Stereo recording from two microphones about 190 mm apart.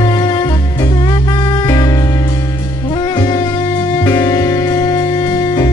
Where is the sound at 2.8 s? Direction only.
25° left (ahead or behind).